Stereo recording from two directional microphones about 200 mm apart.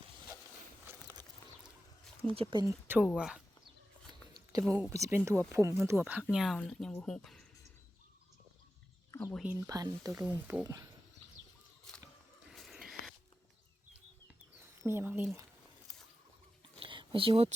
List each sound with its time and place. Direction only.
2.3 s speech: 25° right (ahead or behind)
2.8 s speech: 10° right (ahead or behind)
4.6 s speech: 10° right (ahead or behind)
9.3 s speech: 5° right (ahead or behind)
9.6 s speech: 15° right (ahead or behind)
11.9 s biting: centre (ahead or behind)
12.5 s a sound: centre (ahead or behind)
14.8 s speech: 10° right (ahead or behind)
16.8 s a sound: 25° right (ahead or behind)